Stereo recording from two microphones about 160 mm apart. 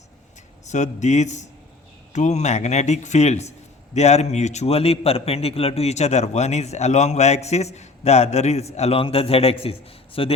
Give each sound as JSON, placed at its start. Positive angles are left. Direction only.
{"t": 0.7, "sound": "a man's voice", "side_deg": 50}